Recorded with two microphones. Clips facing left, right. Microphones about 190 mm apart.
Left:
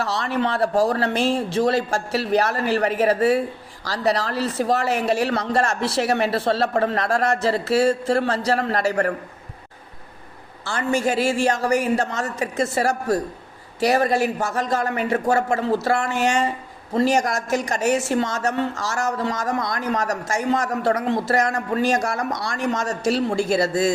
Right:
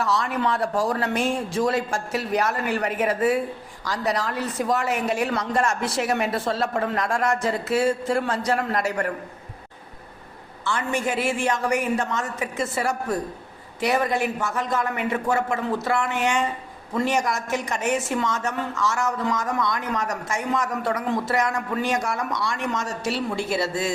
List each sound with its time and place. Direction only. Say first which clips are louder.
0.0 s a man's voice: left 1 dB; 30° left (ahead or behind)
10.6 s a man's voice: left 4 dB; 40° left (ahead or behind)
18.7 s a man's voice: even; 40° left (ahead or behind)